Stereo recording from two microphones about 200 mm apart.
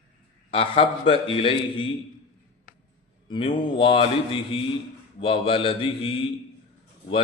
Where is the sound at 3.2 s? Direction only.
25° left (ahead or behind).